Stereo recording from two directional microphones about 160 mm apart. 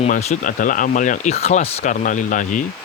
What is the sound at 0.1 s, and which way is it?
Speech, 50° left (ahead or behind).